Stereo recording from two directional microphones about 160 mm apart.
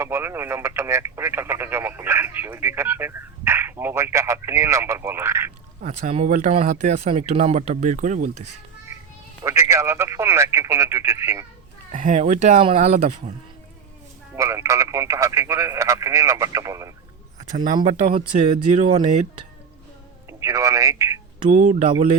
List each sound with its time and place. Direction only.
0.0 s speech: 15° right (ahead or behind)
5.8 s speech: 45° right (ahead or behind)
9.4 s speech: 20° right (ahead or behind)
11.9 s speech: 55° right (ahead or behind)
14.3 s speech: 20° right (ahead or behind)
17.5 s speech: 55° right (ahead or behind)
18.2 s speech: 30° right (ahead or behind)
18.5 s speech: 45° right (ahead or behind)
20.4 s speech: 20° right (ahead or behind)
21.5 s speech: 50° right (ahead or behind)